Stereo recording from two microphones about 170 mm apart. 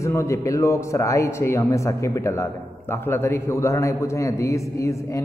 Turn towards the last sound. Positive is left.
turn(degrees=15)  # may be behind; listen again after turning